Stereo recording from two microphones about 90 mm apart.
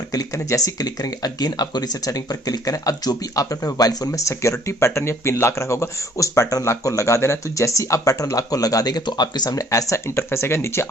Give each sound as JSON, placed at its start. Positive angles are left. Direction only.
{"t": 0.1, "sound": "speech", "side_deg": 40}